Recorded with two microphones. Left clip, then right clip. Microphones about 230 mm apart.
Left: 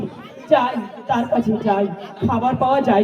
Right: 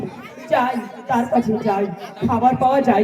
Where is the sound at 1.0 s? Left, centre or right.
Left.